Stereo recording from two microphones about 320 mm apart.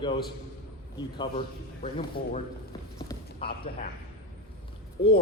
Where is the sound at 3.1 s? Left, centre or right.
Centre.